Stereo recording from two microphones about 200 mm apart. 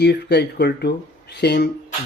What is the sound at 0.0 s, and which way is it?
Speech, 55° left (ahead or behind).